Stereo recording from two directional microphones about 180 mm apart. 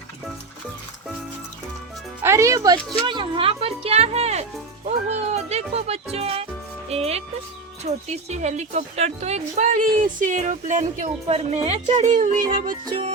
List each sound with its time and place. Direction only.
2.2 s speech: 15° right (ahead or behind); by 4.4 s 35° right (ahead or behind)
5.0 s music: 35° right (ahead or behind)
7.9 s speech: 40° right (ahead or behind)
12.8 s music: 25° right (ahead or behind)